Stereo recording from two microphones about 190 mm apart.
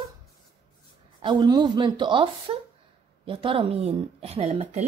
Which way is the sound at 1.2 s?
25° right (ahead or behind).